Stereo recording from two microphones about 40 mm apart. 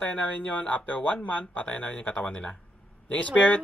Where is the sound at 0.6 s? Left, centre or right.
Left.